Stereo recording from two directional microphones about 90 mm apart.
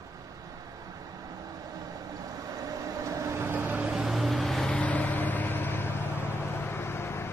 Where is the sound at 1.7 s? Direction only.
40° right (ahead or behind); by 4.0 s 15° right (ahead or behind).